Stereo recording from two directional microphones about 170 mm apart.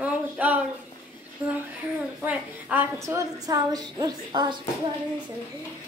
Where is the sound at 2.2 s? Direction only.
10° right (ahead or behind).